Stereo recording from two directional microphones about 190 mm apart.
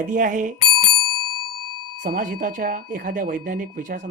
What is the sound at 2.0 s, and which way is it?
Speech, 45° right (ahead or behind).